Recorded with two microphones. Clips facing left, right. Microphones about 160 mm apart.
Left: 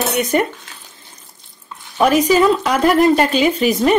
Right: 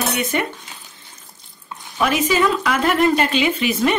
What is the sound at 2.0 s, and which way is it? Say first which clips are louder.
Speech: left 5 dB; 40° left (ahead or behind).